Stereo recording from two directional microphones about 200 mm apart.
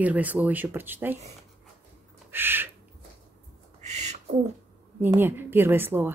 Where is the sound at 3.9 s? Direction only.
35° right (ahead or behind).